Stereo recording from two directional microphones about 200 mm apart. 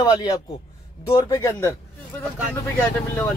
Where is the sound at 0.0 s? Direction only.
20° left (ahead or behind).